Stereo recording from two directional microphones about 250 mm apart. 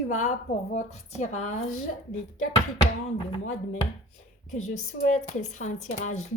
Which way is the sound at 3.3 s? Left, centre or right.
Left.